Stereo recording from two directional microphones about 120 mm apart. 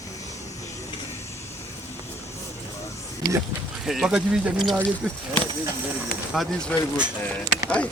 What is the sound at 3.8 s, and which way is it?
Speech, 5° right (ahead or behind).